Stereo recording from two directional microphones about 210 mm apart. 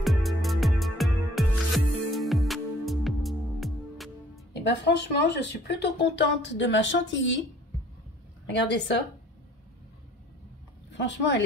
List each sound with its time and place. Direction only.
0.0 s music: centre (ahead or behind)
4.6 s speech: 55° left (ahead or behind)
8.5 s speech: 55° left (ahead or behind)
10.9 s speech: 60° left (ahead or behind)